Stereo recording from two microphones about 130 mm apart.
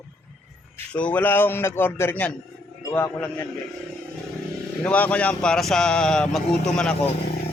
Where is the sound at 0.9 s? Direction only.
10° left (ahead or behind).